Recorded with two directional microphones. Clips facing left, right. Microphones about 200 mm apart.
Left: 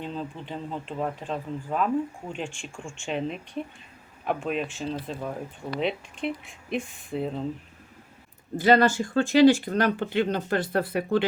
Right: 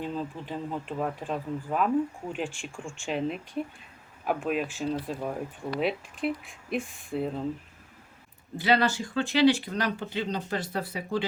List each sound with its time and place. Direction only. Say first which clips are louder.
0.0 s speech: right 1 dB; 5° right (ahead or behind)
8.5 s speech: left 5 dB; 45° left (ahead or behind)